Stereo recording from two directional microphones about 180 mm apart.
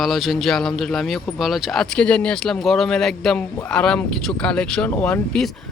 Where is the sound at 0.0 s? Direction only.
Centre (ahead or behind).